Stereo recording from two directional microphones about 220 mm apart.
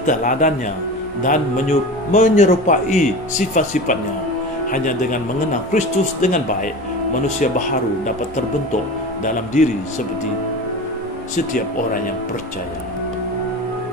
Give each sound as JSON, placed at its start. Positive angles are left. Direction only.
{"t": 0.0, "sound": "speech", "side_deg": 35}
{"t": 9.2, "sound": "speech", "side_deg": 35}
{"t": 11.3, "sound": "speech", "side_deg": 40}